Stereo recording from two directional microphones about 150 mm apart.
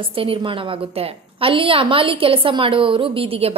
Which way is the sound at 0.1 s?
35° right (ahead or behind).